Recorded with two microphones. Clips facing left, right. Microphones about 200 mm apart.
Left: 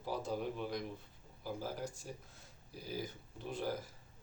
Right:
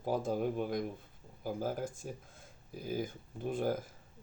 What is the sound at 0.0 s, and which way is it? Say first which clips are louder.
Speech: right 6 dB; 50° right (ahead or behind).